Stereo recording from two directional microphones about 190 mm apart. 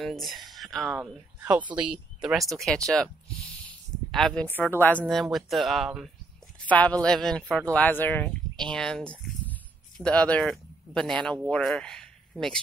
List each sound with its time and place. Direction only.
0.0 s speech: centre (ahead or behind)
4.1 s speech: centre (ahead or behind)